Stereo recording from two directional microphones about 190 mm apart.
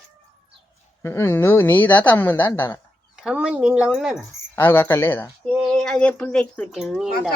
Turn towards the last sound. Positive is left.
turn(degrees=0)  # may be behind; listen again after turning